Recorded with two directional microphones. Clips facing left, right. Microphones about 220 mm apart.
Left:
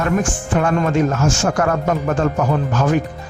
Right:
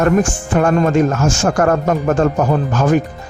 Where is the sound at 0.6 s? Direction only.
40° right (ahead or behind).